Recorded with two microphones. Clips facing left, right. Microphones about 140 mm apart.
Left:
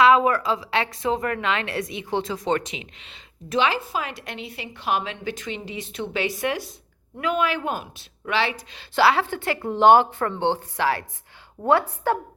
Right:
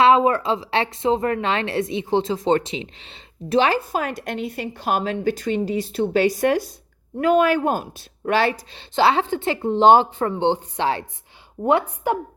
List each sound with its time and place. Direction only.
0.0 s a woman's voice: 25° right (ahead or behind)
3.9 s a woman's voice: 45° right (ahead or behind)
8.7 s a woman's voice: 25° right (ahead or behind)